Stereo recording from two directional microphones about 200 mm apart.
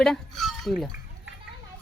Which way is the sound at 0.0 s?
Centre (ahead or behind).